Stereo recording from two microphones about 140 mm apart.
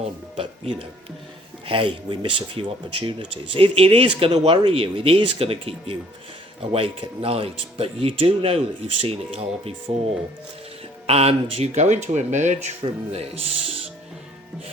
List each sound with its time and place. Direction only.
0.3 s speech: 40° right (ahead or behind)
11.0 s speech: 45° right (ahead or behind)
12.8 s speech: 45° right (ahead or behind)